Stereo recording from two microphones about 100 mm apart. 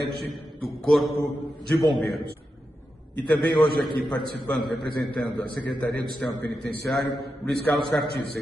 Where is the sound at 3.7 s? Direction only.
Centre (ahead or behind).